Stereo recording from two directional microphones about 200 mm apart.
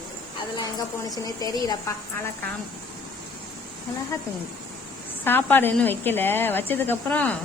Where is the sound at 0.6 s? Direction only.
20° left (ahead or behind).